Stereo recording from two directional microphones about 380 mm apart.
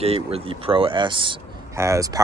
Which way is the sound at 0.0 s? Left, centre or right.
Centre.